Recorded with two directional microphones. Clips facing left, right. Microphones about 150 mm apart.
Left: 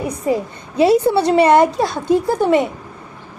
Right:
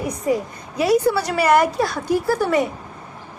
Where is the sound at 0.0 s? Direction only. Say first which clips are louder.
Left 2 dB; 25° left (ahead or behind).